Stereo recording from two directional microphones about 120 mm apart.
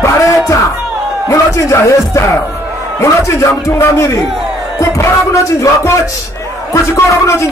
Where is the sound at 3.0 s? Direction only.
25° left (ahead or behind).